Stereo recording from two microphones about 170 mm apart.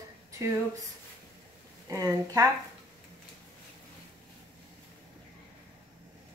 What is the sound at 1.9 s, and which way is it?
Speech, 20° right (ahead or behind).